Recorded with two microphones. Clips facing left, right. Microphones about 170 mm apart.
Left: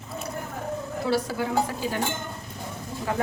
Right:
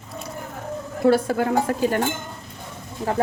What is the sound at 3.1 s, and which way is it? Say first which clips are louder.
Speech: right 5 dB; 40° right (ahead or behind).